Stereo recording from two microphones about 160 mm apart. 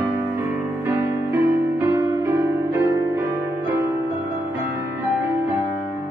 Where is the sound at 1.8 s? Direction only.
15° right (ahead or behind).